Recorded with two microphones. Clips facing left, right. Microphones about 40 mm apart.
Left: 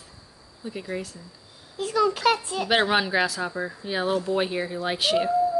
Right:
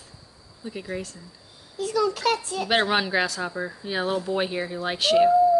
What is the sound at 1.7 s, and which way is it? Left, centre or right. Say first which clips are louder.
Speech: left 1 dB; left.